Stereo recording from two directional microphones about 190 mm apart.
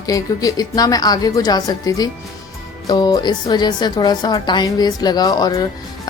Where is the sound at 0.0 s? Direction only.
20° left (ahead or behind).